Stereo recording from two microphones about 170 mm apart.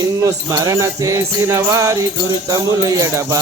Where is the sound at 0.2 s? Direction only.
20° right (ahead or behind).